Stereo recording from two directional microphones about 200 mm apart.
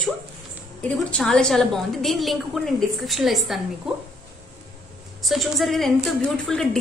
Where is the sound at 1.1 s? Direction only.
5° left (ahead or behind).